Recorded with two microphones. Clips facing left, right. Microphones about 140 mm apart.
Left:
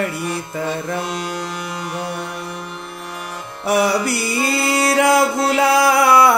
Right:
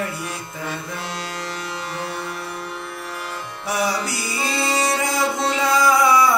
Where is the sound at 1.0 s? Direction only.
15° left (ahead or behind).